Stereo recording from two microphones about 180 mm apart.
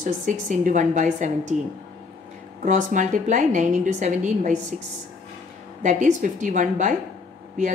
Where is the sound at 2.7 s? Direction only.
45° right (ahead or behind).